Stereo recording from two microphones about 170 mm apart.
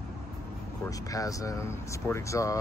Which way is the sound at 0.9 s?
20° left (ahead or behind).